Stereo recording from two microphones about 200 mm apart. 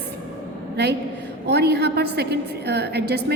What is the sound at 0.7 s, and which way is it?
A woman's voice, 55° right (ahead or behind).